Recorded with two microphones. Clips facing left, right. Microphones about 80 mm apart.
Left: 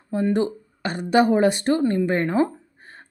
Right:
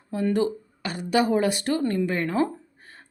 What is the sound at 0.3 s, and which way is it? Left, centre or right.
Speech, left.